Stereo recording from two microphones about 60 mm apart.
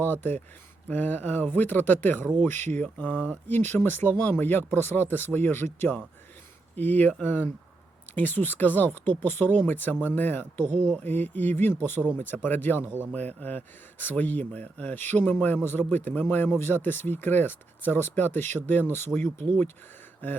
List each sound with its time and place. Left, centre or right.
0.0 s speech: left